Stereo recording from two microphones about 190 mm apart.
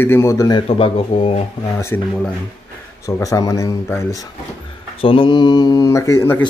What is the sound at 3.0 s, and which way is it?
Speech, 15° left (ahead or behind).